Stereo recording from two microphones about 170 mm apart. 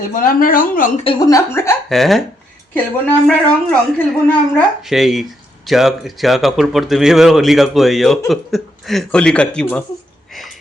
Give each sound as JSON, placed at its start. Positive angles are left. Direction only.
{"t": 0.0, "sound": "speech", "side_deg": 55}
{"t": 1.0, "sound": "a woman's voice", "side_deg": 20}
{"t": 1.9, "sound": "speech", "side_deg": 0}
{"t": 3.2, "sound": "a woman's voice", "side_deg": 10}
{"t": 4.9, "sound": "speech", "side_deg": 0}